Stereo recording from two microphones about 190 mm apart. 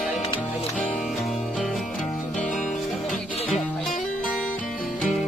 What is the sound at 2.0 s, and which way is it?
Music, 40° left (ahead or behind).